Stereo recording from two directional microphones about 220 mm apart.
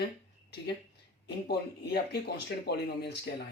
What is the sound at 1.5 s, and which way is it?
Speech, 50° left (ahead or behind).